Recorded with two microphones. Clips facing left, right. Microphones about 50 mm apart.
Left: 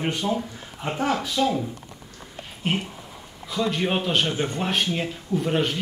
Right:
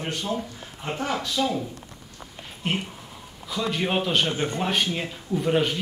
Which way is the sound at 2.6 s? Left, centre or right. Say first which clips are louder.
Left 2 dB; centre.